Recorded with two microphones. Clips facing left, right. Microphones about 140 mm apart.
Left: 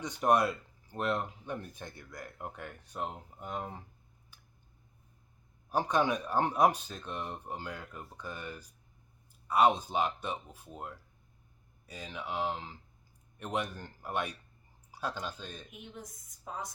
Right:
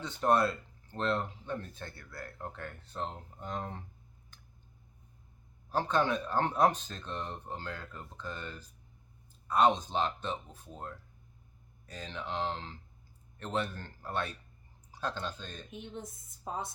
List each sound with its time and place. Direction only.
0.0 s speech: 15° left (ahead or behind)
5.7 s speech: 15° left (ahead or behind)
15.7 s a woman's voice: 25° right (ahead or behind)